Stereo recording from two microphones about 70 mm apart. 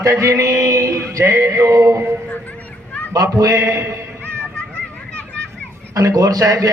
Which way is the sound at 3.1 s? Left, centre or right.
Right.